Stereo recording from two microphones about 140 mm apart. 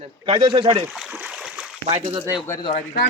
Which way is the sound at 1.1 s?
5° right (ahead or behind).